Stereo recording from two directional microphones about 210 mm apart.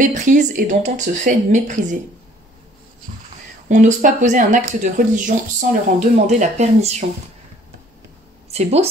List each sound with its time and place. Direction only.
0.0 s speech: 35° right (ahead or behind)
3.1 s a sound: 35° right (ahead or behind)
3.6 s speech: 35° right (ahead or behind)
8.5 s speech: 30° right (ahead or behind)